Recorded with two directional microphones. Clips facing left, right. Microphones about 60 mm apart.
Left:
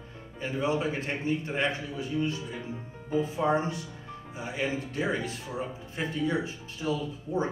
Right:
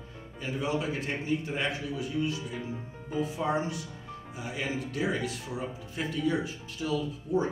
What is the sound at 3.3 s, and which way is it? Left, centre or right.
Speech, left.